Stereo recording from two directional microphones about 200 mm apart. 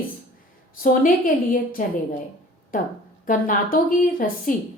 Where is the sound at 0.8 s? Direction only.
45° left (ahead or behind).